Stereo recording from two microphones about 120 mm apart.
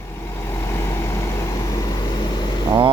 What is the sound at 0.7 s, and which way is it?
Vehicle, 25° left (ahead or behind).